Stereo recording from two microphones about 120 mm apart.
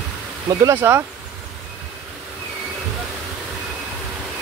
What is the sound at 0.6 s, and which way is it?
Speech, 20° right (ahead or behind).